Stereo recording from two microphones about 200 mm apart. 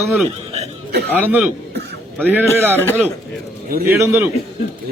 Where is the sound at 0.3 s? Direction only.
30° right (ahead or behind).